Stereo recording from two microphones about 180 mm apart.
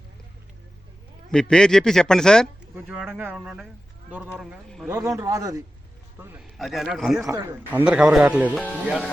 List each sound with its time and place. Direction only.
1.3 s speech: 5° left (ahead or behind)
2.7 s speech: 10° right (ahead or behind)
4.9 s speech: 15° right (ahead or behind)
6.6 s speech: centre (ahead or behind)
7.3 s speech: 15° right (ahead or behind); by 9.0 s centre (ahead or behind)